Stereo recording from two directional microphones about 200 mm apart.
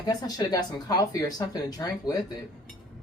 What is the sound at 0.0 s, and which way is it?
Speech, 20° left (ahead or behind).